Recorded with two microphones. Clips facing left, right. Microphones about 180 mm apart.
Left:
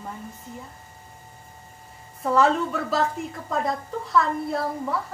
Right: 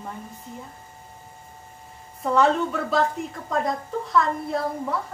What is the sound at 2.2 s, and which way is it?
A woman's voice, centre (ahead or behind).